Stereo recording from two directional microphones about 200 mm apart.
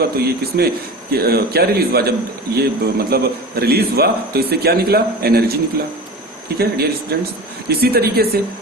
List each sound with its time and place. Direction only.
0.0 s a man's voice: 50° right (ahead or behind)
6.6 s a man's voice: 50° right (ahead or behind)